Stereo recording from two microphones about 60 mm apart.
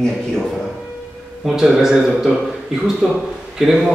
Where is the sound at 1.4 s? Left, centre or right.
Centre.